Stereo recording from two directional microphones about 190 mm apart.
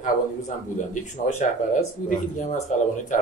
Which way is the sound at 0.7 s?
40° left (ahead or behind).